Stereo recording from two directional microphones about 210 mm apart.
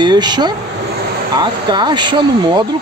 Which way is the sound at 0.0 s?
20° right (ahead or behind).